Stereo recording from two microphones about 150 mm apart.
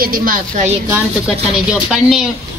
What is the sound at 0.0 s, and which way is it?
Speech, 70° right (ahead or behind).